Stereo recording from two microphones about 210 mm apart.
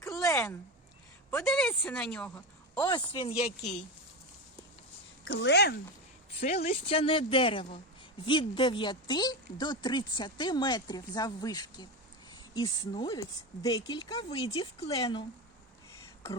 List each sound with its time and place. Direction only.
0.2 s a sound: 15° left (ahead or behind)
1.5 s a woman's voice: 5° left (ahead or behind)
2.8 s speech: 20° left (ahead or behind)
5.2 s speech: 55° left (ahead or behind)
6.7 s speech: 25° left (ahead or behind)